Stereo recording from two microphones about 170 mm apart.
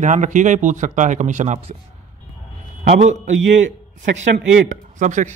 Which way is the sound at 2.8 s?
40° right (ahead or behind).